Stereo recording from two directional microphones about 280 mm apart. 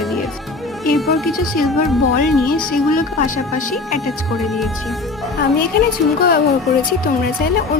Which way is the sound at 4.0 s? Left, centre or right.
Centre.